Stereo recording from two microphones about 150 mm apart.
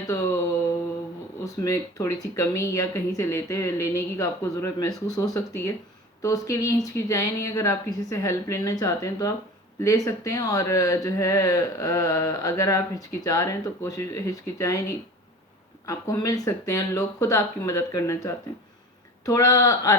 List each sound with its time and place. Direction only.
1.6 s speech: 20° left (ahead or behind)